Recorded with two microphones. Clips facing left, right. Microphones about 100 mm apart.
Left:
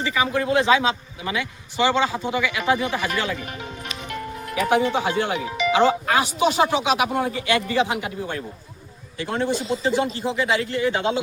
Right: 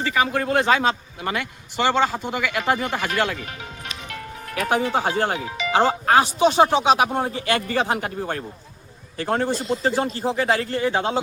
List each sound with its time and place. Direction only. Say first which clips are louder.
0.0 s a man's voice: right 1 dB; 50° right (ahead or behind)
4.7 s a man's voice: left 1 dB; 45° right (ahead or behind)
9.5 s a man's voice: even; centre (ahead or behind)
9.8 s speech: even; 40° right (ahead or behind)